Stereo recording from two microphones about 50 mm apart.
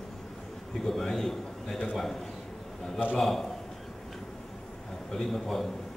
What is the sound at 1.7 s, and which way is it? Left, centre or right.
Speech, centre.